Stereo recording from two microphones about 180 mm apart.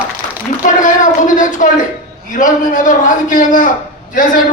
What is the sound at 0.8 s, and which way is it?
A man's voice, 45° left (ahead or behind).